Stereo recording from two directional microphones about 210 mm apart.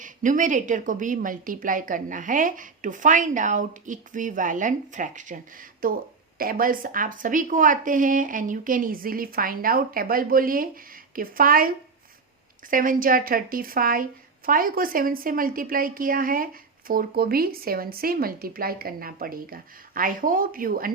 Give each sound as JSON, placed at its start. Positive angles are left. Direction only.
{"t": 0.0, "sound": "a woman's voice", "side_deg": -40}
{"t": 12.7, "sound": "a woman's voice", "side_deg": -40}